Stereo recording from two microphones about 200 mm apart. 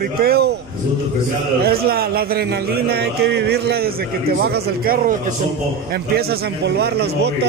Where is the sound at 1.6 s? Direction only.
50° right (ahead or behind).